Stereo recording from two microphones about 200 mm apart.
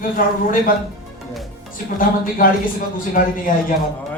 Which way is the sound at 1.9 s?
45° left (ahead or behind).